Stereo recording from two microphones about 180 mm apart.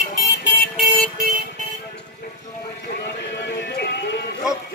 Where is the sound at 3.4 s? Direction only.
65° left (ahead or behind).